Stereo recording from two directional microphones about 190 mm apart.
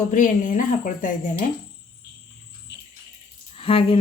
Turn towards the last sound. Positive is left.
turn(degrees=30)  # may be behind; listen again after turning